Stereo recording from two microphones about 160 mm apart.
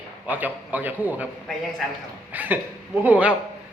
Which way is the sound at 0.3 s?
10° right (ahead or behind).